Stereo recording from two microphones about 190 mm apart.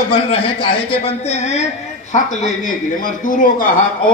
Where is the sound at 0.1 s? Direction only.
25° left (ahead or behind); by 4.1 s 45° left (ahead or behind).